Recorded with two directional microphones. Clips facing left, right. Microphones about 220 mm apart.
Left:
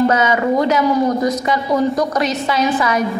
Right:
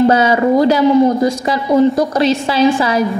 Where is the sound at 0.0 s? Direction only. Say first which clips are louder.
Right 4 dB; 30° right (ahead or behind).